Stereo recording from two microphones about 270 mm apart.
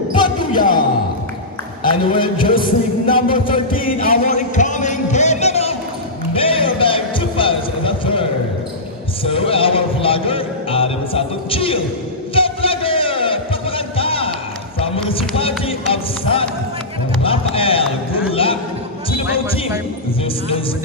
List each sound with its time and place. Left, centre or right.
0.1 s music: centre
1.8 s a man's voice: centre
2.6 s music: centre
17.2 s a sound: left
19.0 s basketball bounce: left